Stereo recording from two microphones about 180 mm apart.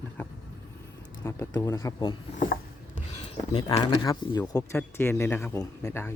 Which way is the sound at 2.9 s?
40° left (ahead or behind).